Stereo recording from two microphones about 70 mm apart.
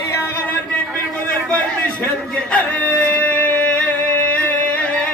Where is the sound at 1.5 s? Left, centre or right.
Centre.